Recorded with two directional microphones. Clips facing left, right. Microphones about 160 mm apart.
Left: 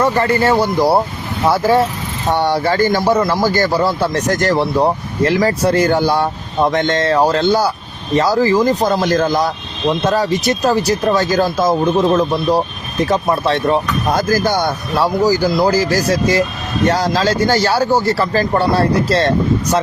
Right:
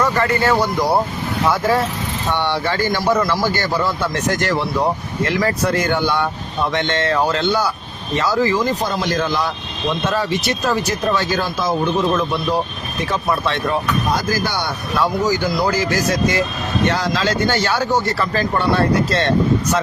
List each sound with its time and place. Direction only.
0.0 s speech: 30° left (ahead or behind)
14.1 s speech: 50° left (ahead or behind)
14.9 s speech: 35° left (ahead or behind)